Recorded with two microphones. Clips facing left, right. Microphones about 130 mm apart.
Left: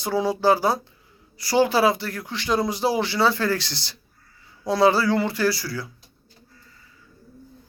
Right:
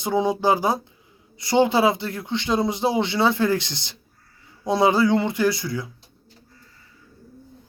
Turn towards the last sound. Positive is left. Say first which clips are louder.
# right 2 dB
turn(degrees=-20)  # may be behind; listen again after turning